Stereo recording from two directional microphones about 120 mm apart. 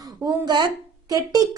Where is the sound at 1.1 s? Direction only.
30° right (ahead or behind).